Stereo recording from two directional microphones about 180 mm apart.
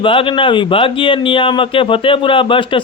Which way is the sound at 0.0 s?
30° left (ahead or behind).